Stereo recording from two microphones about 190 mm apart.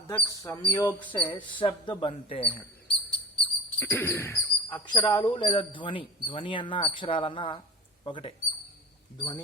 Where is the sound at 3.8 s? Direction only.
10° left (ahead or behind).